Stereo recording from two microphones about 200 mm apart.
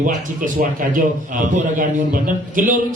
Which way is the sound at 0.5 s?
40° right (ahead or behind).